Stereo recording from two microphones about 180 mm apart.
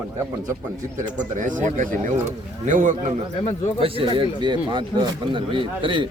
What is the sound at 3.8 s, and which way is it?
Speech, 30° right (ahead or behind).